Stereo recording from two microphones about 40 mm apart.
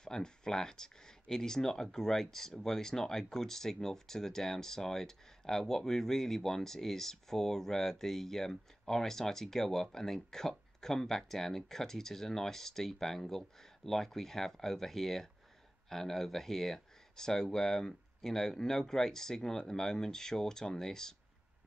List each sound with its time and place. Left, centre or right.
0.0 s speech: centre